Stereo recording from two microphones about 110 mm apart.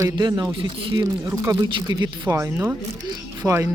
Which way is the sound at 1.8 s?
30° right (ahead or behind).